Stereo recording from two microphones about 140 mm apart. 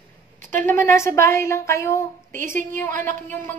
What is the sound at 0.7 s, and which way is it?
A woman's voice, 20° left (ahead or behind).